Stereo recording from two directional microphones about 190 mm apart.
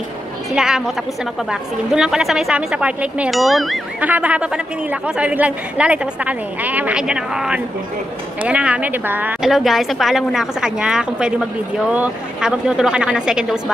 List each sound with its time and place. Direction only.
0.5 s a woman's voice: 5° right (ahead or behind)